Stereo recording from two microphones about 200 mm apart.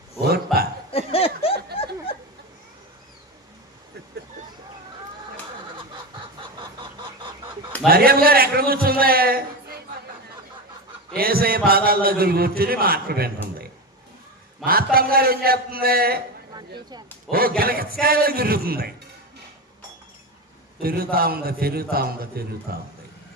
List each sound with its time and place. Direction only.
0.3 s a sound: 50° right (ahead or behind)
0.9 s chuckle: 30° left (ahead or behind)
6.4 s chicken: 25° right (ahead or behind)
7.9 s a man's voice: 50° right (ahead or behind)
11.2 s a man's voice: 50° right (ahead or behind)
17.6 s a man's voice: 50° right (ahead or behind)
20.8 s a man's voice: 50° right (ahead or behind)